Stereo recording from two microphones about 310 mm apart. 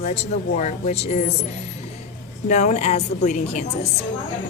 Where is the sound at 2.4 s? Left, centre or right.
Left.